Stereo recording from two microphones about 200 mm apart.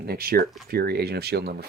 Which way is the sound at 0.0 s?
50° right (ahead or behind).